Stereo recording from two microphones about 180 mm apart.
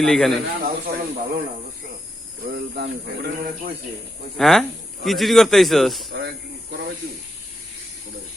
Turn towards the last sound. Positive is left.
turn(degrees=-65)  # may be behind; listen again after turning